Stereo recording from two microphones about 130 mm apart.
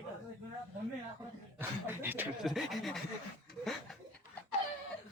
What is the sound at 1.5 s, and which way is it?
Speech, 15° right (ahead or behind).